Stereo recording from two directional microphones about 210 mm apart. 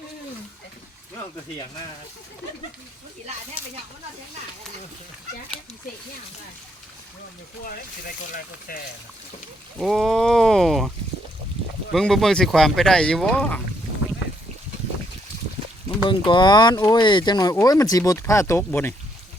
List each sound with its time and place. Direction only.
8.0 s speech: 45° left (ahead or behind)
9.7 s speech: centre (ahead or behind)
16.0 s speech: 20° left (ahead or behind)